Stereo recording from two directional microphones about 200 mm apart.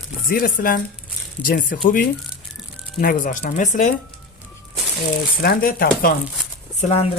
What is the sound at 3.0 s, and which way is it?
Speech, 40° left (ahead or behind).